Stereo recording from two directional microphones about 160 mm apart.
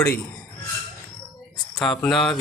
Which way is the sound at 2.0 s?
Centre (ahead or behind).